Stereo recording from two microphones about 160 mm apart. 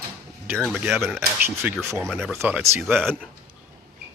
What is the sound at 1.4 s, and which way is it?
Speech, 10° right (ahead or behind).